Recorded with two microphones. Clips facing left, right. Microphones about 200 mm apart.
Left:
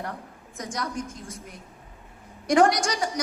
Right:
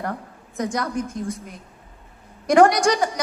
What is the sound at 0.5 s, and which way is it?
Speech, 55° right (ahead or behind).